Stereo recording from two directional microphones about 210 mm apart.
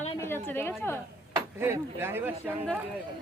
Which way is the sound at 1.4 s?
10° right (ahead or behind).